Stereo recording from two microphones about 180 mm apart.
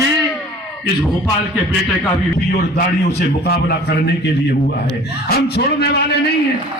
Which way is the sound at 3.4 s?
60° left (ahead or behind).